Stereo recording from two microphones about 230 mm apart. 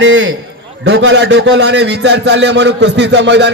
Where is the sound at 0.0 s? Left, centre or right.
Right.